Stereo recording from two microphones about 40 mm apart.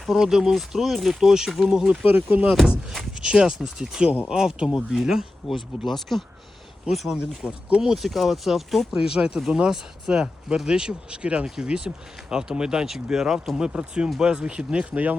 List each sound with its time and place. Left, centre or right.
0.0 s speech: centre
1.3 s speech: centre
2.0 s speech: right
3.2 s speech: right
5.8 s speech: centre
7.2 s speech: right
7.8 s speech: centre
8.0 s speech: centre
13.6 s speech: right
14.9 s speech: right